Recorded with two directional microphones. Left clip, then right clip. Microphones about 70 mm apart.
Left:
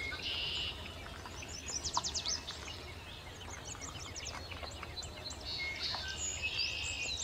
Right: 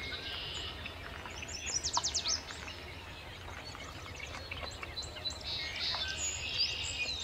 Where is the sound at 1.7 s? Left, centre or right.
Right.